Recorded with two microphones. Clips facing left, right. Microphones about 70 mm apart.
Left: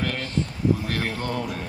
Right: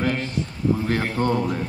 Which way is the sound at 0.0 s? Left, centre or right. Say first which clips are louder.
Right 4 dB; right.